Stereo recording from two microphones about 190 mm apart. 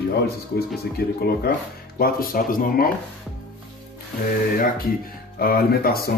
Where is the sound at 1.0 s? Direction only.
55° left (ahead or behind).